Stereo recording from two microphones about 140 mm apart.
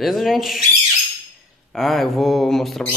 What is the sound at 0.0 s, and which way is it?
Speech, centre (ahead or behind).